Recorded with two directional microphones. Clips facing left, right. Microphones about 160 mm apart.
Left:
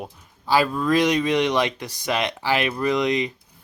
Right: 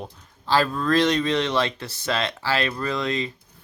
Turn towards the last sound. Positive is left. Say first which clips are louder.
# left 5 dB
turn(degrees=15)  # may be behind; listen again after turning